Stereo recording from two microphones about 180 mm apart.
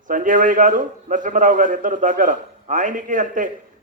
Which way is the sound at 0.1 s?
45° right (ahead or behind).